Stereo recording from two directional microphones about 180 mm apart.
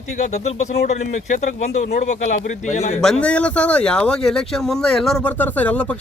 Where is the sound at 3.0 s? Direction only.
5° left (ahead or behind).